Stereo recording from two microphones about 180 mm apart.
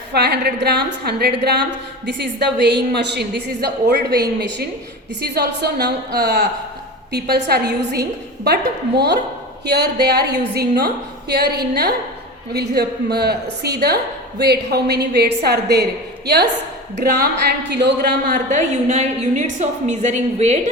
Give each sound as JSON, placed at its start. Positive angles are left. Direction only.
{"t": 0.1, "sound": "a woman's voice", "side_deg": -65}
{"t": 9.6, "sound": "a woman's voice", "side_deg": -65}
{"t": 17.7, "sound": "a woman's voice", "side_deg": -70}